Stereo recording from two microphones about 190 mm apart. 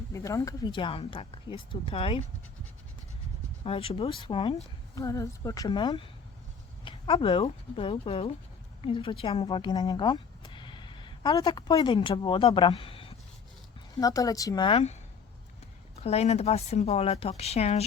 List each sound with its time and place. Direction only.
0.1 s speech: 15° left (ahead or behind)
3.6 s speech: 30° left (ahead or behind)
4.9 s speech: 15° left (ahead or behind)
16.0 s speech: 35° left (ahead or behind)